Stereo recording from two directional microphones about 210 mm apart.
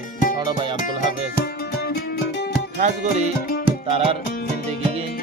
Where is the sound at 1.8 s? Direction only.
50° left (ahead or behind).